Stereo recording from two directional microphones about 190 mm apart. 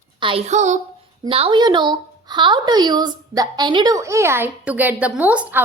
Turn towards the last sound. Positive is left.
turn(degrees=-10)  # may be behind; listen again after turning